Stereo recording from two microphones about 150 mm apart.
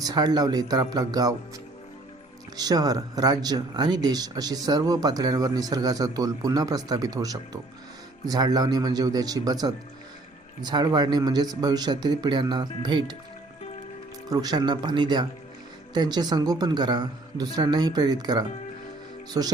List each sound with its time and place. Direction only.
0.0 s speech: 25° right (ahead or behind)
2.6 s speech: 25° right (ahead or behind)
14.3 s speech: 25° right (ahead or behind)